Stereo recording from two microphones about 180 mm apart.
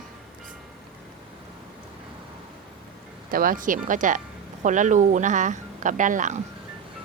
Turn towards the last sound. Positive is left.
turn(degrees=-45)  # may be behind; listen again after turning